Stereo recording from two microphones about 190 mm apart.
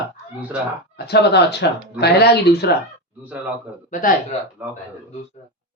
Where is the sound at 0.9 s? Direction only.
60° left (ahead or behind).